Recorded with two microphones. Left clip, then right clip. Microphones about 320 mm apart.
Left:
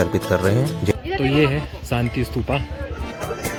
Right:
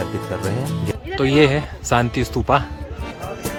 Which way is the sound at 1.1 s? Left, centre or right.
Centre.